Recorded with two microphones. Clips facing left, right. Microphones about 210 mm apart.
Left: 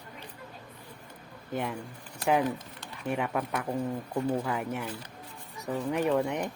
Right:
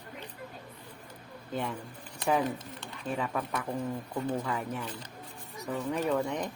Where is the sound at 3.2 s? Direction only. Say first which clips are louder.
Left 1 dB; 15° left (ahead or behind).